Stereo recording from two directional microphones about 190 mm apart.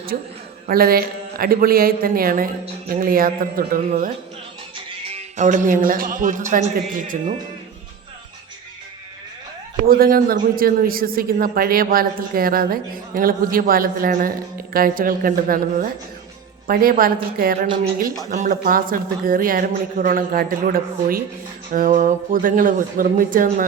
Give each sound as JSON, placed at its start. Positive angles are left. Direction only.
{"t": 0.7, "sound": "a man's voice", "side_deg": -50}
{"t": 5.0, "sound": "a man's voice", "side_deg": -35}
{"t": 9.9, "sound": "a man's voice", "side_deg": -50}